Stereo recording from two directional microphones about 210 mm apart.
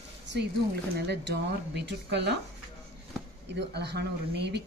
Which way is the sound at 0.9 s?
50° right (ahead or behind).